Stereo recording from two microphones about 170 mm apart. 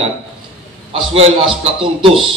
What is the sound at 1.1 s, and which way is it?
Speech, 35° right (ahead or behind).